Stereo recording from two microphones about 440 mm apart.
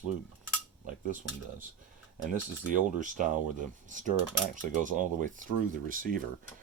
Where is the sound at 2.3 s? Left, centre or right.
Centre.